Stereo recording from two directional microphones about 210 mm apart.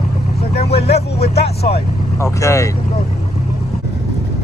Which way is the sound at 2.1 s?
15° left (ahead or behind).